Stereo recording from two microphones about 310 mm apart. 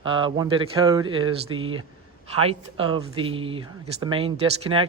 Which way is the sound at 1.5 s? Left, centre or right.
Right.